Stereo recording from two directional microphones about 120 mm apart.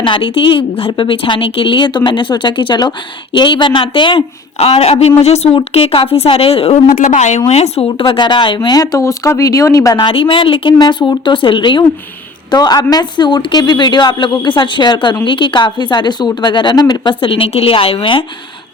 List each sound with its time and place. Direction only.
0.0 s speech: 45° left (ahead or behind)
4.5 s a woman's voice: 60° left (ahead or behind)
5.5 s a woman's voice: 50° left (ahead or behind); by 7.4 s 80° left
7.5 s a woman's voice: 60° left (ahead or behind)
7.9 s speech: 40° left (ahead or behind)
10.0 s speech: 45° left (ahead or behind)